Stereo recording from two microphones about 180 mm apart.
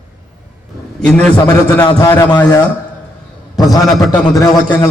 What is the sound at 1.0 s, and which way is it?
A man's voice, 5° left (ahead or behind).